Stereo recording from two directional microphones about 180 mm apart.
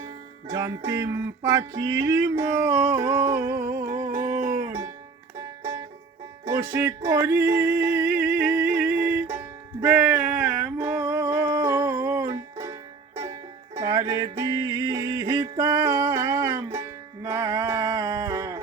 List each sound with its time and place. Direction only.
0.4 s music: 20° right (ahead or behind)
6.4 s music: 15° right (ahead or behind)
10.3 s a sound: 10° right (ahead or behind)
11.0 s music: 15° right (ahead or behind)
13.7 s music: 20° right (ahead or behind)
17.2 s a sound: 15° right (ahead or behind)